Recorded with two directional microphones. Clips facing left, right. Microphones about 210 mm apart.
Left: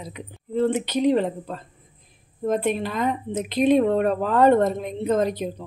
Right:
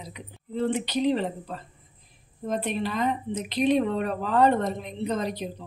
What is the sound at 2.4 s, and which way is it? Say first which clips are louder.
Speech: left 5 dB; 50° left (ahead or behind).